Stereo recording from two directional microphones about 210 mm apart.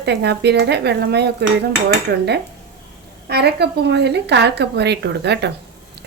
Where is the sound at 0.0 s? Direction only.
50° right (ahead or behind).